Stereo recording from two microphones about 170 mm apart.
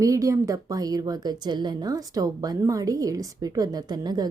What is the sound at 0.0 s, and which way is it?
A woman's voice, 20° right (ahead or behind).